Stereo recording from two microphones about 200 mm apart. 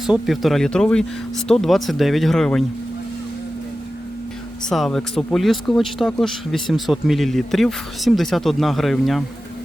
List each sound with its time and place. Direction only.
0.0 s speech: centre (ahead or behind)
4.7 s speech: centre (ahead or behind)